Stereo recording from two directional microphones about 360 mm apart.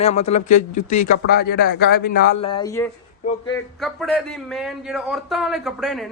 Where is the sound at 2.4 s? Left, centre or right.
Centre.